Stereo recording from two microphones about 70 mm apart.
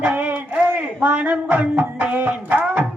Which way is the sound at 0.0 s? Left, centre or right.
Right.